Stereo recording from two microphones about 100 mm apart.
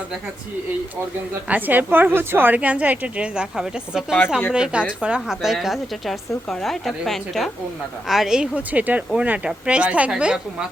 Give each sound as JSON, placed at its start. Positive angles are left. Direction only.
{"t": 1.5, "sound": "a woman's voice", "side_deg": -15}